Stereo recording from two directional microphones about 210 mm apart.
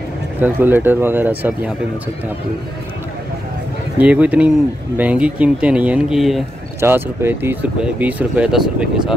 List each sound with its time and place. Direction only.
0.4 s speech: 10° right (ahead or behind)
4.0 s speech: 5° right (ahead or behind)